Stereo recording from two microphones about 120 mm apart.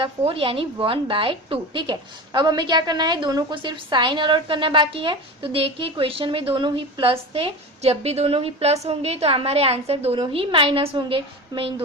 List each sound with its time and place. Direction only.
0.0 s a woman's voice: 50° right (ahead or behind)
10.2 s a woman's voice: 45° right (ahead or behind)